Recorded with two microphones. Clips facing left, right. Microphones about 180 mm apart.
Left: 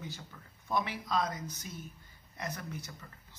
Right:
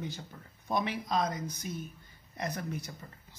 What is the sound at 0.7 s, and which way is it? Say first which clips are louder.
Speech: right 2 dB; 20° right (ahead or behind).